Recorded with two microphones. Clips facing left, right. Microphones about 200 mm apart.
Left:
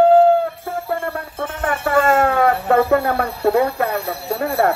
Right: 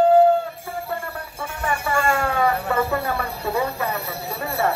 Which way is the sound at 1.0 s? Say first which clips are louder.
Left 7 dB; 55° left (ahead or behind).